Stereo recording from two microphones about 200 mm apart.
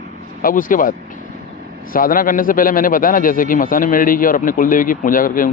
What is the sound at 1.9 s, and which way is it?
A man's voice, 45° left (ahead or behind).